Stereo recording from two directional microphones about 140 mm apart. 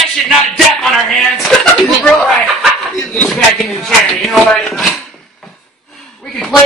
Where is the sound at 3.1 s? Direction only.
5° left (ahead or behind).